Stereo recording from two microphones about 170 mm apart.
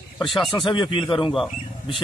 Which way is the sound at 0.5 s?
25° left (ahead or behind).